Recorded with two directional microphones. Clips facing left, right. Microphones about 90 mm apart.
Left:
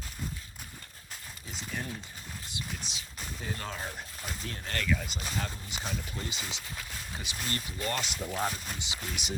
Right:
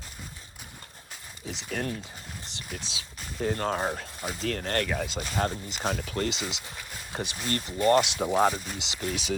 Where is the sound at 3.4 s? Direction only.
50° right (ahead or behind); by 4.1 s 75° right (ahead or behind).